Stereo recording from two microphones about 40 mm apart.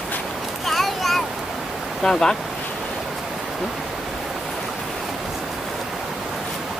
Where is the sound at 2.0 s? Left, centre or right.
Centre.